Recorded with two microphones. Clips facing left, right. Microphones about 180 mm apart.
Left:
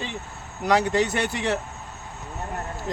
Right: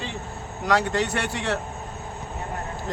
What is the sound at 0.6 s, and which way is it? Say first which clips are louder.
Speech: left 2 dB; 20° left (ahead or behind).